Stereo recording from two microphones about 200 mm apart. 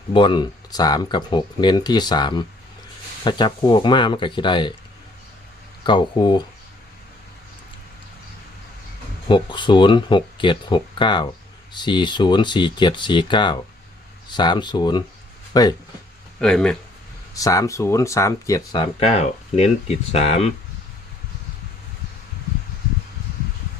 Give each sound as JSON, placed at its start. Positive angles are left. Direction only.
{"t": 0.1, "sound": "speech", "side_deg": 25}
{"t": 5.8, "sound": "speech", "side_deg": 25}
{"t": 9.2, "sound": "speech", "side_deg": 25}
{"t": 16.4, "sound": "speech", "side_deg": 5}
{"t": 17.3, "sound": "speech", "side_deg": 15}